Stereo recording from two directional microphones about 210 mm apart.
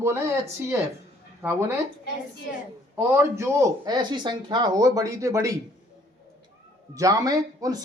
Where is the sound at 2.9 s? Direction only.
10° right (ahead or behind).